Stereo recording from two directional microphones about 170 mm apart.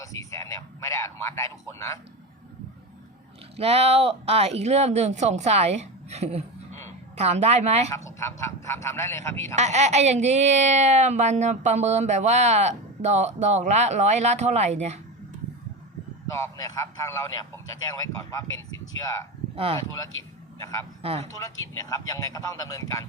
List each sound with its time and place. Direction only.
0.0 s a sound: 20° left (ahead or behind)
3.6 s speech: 35° right (ahead or behind)
7.9 s a man's voice: 20° left (ahead or behind)
9.6 s speech: 40° right (ahead or behind)
16.3 s speech: 20° left (ahead or behind)
19.5 s speech: 35° right (ahead or behind)
20.6 s a man's voice: 20° left (ahead or behind)
21.0 s speech: 35° right (ahead or behind)
21.3 s speech: 20° left (ahead or behind)